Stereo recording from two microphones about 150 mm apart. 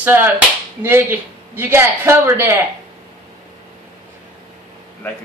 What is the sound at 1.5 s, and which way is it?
Speech, 15° right (ahead or behind).